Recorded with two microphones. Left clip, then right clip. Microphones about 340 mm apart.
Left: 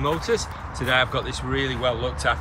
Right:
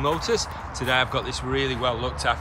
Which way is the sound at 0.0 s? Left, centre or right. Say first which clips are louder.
Even; centre.